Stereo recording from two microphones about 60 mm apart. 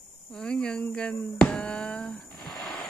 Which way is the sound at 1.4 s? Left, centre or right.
Centre.